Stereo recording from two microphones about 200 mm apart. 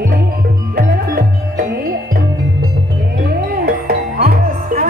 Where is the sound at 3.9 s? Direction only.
50° right (ahead or behind).